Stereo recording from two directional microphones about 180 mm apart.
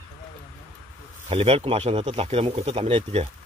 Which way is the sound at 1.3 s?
30° right (ahead or behind).